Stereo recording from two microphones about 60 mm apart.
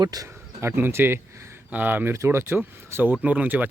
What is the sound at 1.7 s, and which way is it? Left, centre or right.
Speech, right.